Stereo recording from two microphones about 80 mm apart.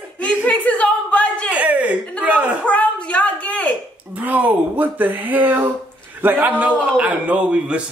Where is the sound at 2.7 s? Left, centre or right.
Centre.